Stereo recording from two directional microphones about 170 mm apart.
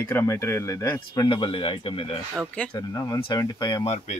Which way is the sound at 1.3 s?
30° left (ahead or behind).